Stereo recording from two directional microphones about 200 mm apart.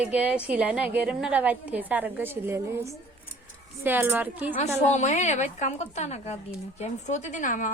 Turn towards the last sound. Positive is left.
turn(degrees=40)  # may be behind; listen again after turning